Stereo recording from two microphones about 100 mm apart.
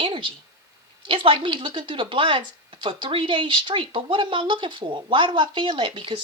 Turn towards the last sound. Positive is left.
turn(degrees=-55)  # may be behind; listen again after turning